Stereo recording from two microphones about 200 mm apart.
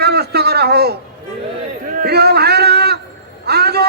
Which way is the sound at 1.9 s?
50° right (ahead or behind).